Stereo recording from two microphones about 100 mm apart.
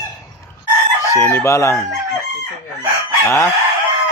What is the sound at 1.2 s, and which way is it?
Speech, 30° left (ahead or behind).